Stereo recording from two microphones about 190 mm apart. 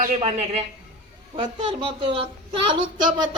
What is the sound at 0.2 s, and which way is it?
Speech, 30° right (ahead or behind).